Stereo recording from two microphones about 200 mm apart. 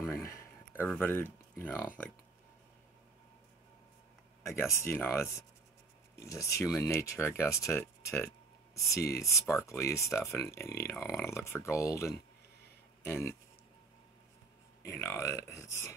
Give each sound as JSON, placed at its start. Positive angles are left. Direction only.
{"t": 0.1, "sound": "a sound", "side_deg": 15}
{"t": 4.4, "sound": "speech", "side_deg": 15}
{"t": 14.9, "sound": "speech", "side_deg": 15}